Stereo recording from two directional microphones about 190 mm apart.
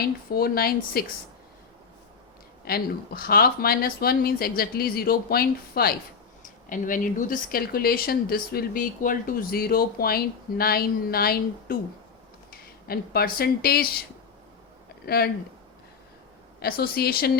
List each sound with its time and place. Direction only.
0.0 s speech: 55° left (ahead or behind)
2.6 s speech: 55° left (ahead or behind)
15.0 s speech: 55° left (ahead or behind)
16.6 s speech: 50° left (ahead or behind)